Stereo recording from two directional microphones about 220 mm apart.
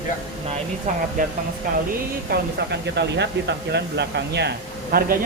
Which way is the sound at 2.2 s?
50° right (ahead or behind).